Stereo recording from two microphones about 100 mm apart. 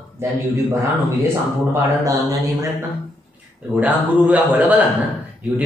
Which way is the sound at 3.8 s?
15° right (ahead or behind).